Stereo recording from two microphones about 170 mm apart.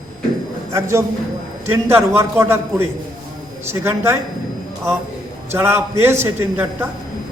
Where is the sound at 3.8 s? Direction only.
15° right (ahead or behind).